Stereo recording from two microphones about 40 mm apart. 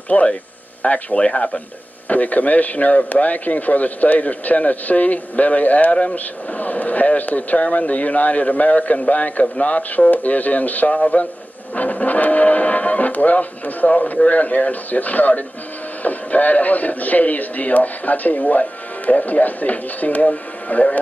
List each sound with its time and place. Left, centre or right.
0.1 s speech: left
2.0 s speech: left